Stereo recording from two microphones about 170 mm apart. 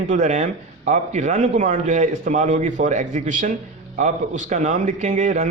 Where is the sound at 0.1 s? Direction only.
45° right (ahead or behind).